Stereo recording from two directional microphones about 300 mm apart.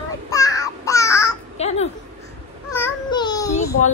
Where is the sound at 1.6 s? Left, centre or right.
Left.